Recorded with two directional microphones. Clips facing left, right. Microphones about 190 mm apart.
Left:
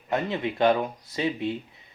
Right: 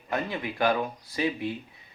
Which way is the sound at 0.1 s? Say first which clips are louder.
Left 4 dB; 25° left (ahead or behind).